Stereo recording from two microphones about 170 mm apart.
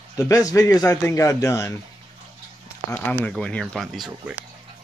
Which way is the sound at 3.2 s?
5° left (ahead or behind).